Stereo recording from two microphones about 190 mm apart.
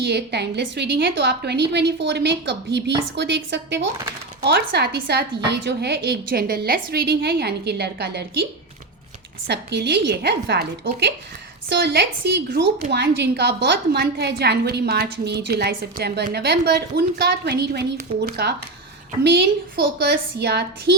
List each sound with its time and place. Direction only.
0.0 s a woman's voice: 60° right (ahead or behind)
9.5 s a woman's voice: 65° right (ahead or behind)